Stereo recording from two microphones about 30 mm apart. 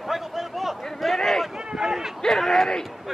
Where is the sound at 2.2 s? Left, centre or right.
Centre.